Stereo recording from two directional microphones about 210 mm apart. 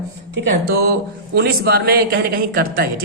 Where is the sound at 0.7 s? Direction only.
45° right (ahead or behind).